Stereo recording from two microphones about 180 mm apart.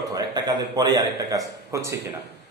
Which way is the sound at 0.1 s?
20° right (ahead or behind).